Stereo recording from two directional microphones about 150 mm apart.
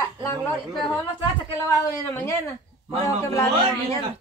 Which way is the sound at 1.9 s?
20° left (ahead or behind).